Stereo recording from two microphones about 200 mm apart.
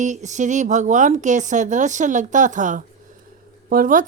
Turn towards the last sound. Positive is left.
turn(degrees=-45)  # may be behind; listen again after turning